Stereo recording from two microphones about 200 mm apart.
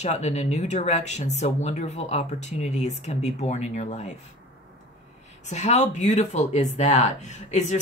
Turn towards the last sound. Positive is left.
turn(degrees=35)  # may be behind; listen again after turning